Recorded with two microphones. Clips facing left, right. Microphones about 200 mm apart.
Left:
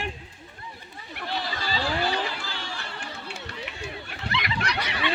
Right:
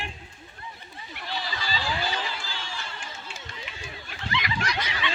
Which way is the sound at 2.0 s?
65° left (ahead or behind).